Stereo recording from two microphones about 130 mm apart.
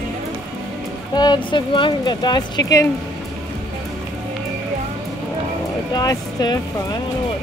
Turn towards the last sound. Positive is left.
turn(degrees=30)  # may be behind; listen again after turning